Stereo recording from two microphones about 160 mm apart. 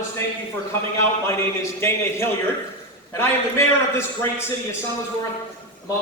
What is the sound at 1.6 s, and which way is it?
A man's voice, 15° left (ahead or behind).